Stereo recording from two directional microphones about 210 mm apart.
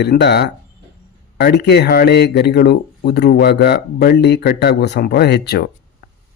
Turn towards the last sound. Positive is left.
turn(degrees=50)  # may be behind; listen again after turning